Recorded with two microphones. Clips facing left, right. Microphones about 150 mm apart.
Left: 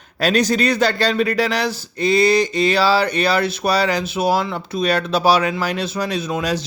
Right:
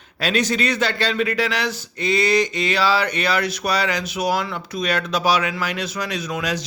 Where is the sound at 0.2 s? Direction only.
40° left (ahead or behind).